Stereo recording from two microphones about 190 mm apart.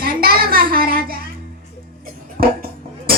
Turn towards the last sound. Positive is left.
turn(degrees=-50)  # may be behind; listen again after turning